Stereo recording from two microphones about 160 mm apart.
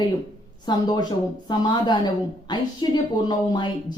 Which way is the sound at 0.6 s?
25° left (ahead or behind).